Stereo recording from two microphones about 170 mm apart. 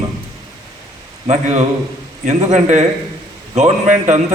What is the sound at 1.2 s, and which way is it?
A man's voice, 40° right (ahead or behind).